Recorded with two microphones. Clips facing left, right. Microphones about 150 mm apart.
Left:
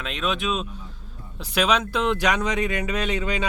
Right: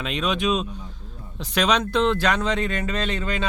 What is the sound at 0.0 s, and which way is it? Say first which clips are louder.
Speech: right 3 dB; centre (ahead or behind).